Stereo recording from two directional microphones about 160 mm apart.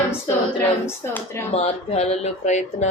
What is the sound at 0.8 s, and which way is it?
Speech, 15° left (ahead or behind).